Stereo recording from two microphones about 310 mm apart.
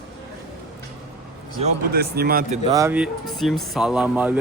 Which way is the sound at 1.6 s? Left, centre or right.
Right.